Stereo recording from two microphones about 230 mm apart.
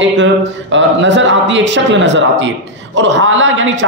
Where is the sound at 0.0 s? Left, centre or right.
Right.